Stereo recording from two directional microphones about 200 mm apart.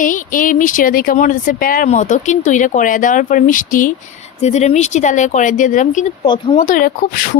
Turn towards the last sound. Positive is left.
turn(degrees=45)  # may be behind; listen again after turning